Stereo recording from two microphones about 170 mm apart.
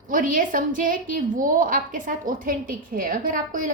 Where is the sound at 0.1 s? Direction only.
55° right (ahead or behind).